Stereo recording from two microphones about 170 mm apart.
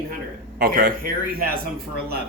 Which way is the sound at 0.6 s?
60° right (ahead or behind).